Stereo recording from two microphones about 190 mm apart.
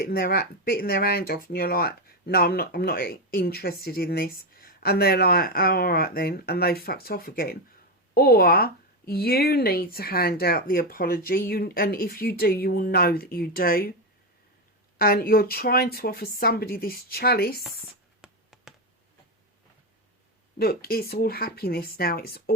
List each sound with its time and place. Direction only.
0.0 s speech: 50° left (ahead or behind)
14.9 s speech: 50° left (ahead or behind)
18.2 s a sound: centre (ahead or behind)
20.6 s speech: 55° left (ahead or behind)